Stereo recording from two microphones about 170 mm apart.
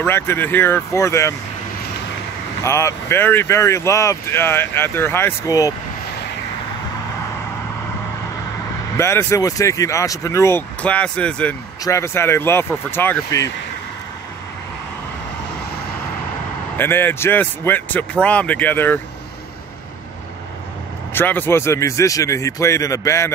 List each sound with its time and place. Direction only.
0.0 s speech: 15° left (ahead or behind)
2.6 s speech: 15° left (ahead or behind)
8.9 s speech: 15° left (ahead or behind)
16.7 s speech: 10° left (ahead or behind)
21.1 s speech: 10° left (ahead or behind)